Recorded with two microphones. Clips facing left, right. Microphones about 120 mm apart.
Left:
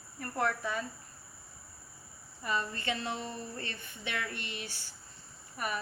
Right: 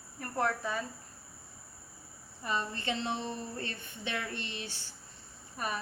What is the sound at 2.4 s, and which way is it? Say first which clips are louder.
A woman's voice: even; 20° right (ahead or behind).